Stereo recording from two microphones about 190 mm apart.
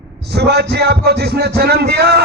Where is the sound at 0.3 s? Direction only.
60° right (ahead or behind).